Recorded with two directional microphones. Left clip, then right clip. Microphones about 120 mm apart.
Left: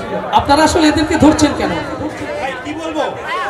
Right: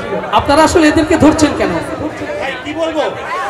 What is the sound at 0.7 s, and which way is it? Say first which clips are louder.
Speech: right 3 dB; 25° left (ahead or behind).